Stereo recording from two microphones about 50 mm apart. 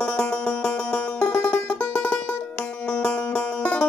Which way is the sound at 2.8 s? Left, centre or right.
Left.